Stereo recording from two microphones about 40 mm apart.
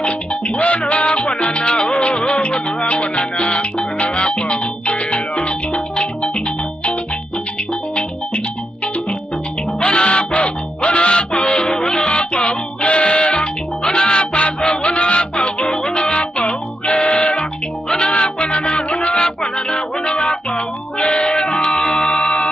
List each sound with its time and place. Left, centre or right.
0.0 s music: left
9.8 s music: left
22.0 s a capella: left